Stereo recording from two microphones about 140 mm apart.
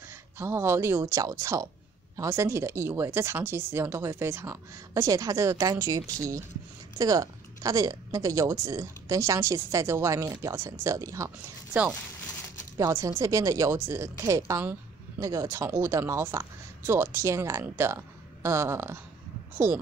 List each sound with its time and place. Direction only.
0.1 s speech: 20° right (ahead or behind)
12.7 s speech: 20° right (ahead or behind)